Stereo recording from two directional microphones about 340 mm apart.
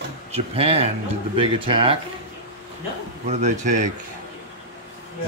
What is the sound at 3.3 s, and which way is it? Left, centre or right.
Speech, centre.